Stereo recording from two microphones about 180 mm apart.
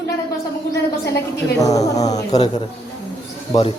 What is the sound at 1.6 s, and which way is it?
Speech, 20° left (ahead or behind).